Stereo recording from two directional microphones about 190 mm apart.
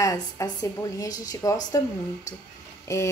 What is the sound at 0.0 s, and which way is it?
A woman's voice, 15° left (ahead or behind).